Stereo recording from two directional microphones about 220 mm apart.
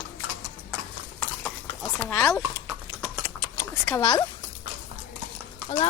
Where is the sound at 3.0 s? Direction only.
10° left (ahead or behind).